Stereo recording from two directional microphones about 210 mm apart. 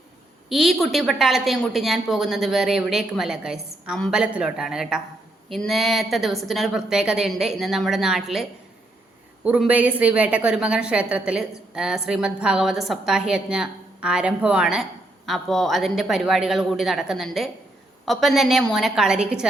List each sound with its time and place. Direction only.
0.4 s a woman's voice: centre (ahead or behind)